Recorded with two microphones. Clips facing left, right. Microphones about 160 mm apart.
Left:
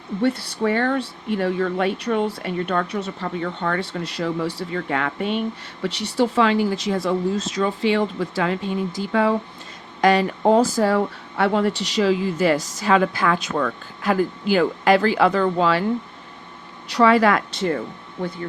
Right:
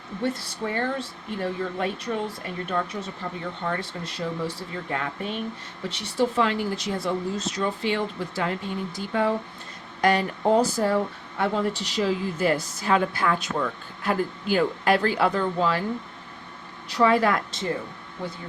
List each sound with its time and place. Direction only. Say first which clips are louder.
0.2 s speech: left 7 dB; 70° left (ahead or behind); by 15.8 s 90° left
16.9 s speech: left 4 dB; 90° left